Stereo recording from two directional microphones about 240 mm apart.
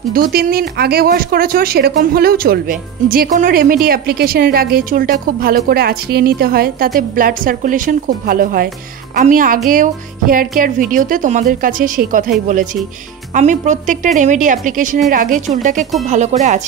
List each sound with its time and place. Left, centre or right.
0.1 s speech: right